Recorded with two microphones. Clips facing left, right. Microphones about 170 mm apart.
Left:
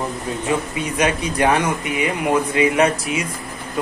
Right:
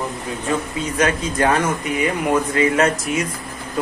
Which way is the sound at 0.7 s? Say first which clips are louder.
Even; 15° left (ahead or behind).